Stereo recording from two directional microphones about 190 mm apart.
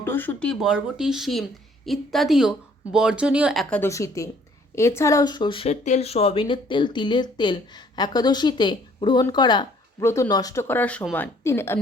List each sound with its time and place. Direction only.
0.0 s speech: 10° left (ahead or behind)
3.8 s a woman's voice: 15° left (ahead or behind)